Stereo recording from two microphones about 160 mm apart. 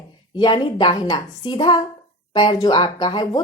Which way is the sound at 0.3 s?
30° left (ahead or behind).